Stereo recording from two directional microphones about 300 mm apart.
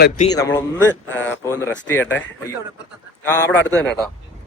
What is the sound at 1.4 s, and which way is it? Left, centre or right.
Speech, centre.